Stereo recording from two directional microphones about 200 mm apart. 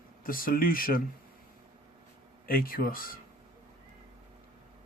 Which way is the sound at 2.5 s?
45° left (ahead or behind).